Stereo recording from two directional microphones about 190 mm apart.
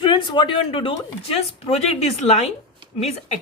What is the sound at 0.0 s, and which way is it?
Speech, 25° left (ahead or behind).